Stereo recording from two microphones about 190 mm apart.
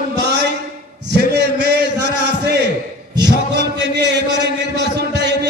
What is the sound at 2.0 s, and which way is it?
Chant, 65° right (ahead or behind).